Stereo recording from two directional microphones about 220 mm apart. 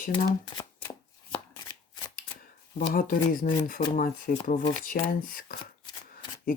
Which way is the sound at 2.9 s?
40° left (ahead or behind).